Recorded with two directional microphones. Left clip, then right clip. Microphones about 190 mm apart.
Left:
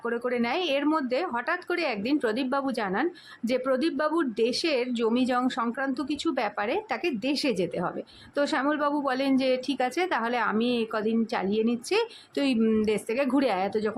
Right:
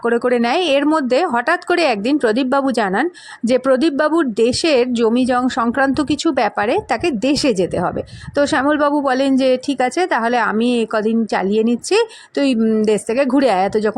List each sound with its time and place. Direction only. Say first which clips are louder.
0.0 s speech: right 12 dB; 40° right (ahead or behind)